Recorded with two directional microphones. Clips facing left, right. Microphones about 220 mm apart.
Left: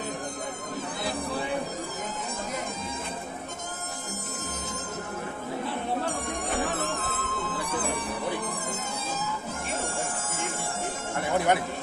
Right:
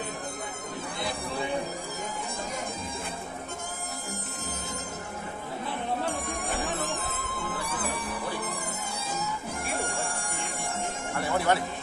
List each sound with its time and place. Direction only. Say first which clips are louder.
7.2 s music: left 2 dB; 10° right (ahead or behind)
11.1 s music: left 1 dB; 20° left (ahead or behind)